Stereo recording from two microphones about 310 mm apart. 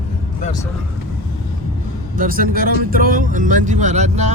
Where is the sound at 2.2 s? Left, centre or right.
Right.